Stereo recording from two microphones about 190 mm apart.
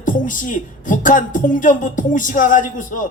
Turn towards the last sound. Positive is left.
turn(degrees=45)  # may be behind; listen again after turning